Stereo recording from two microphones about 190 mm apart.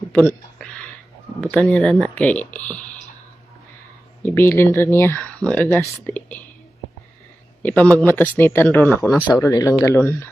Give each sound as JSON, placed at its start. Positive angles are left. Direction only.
{"t": 0.1, "sound": "a sound", "side_deg": 5}
{"t": 1.4, "sound": "speech", "side_deg": 5}
{"t": 4.2, "sound": "speech", "side_deg": 15}
{"t": 7.6, "sound": "speech", "side_deg": 10}